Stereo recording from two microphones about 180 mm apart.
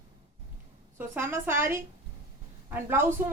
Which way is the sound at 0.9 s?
10° right (ahead or behind).